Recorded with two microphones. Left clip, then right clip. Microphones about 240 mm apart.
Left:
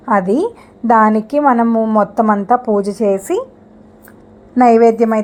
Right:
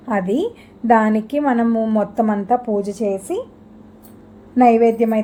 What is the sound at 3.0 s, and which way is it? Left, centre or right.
Speech, left.